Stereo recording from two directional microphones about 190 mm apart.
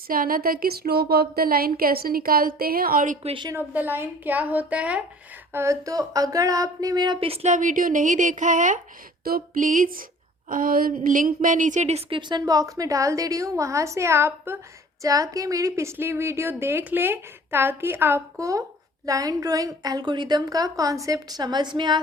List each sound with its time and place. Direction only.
0.1 s speech: 50° right (ahead or behind)
3.3 s a woman's voice: 20° right (ahead or behind)
3.7 s a woman's voice: 10° right (ahead or behind)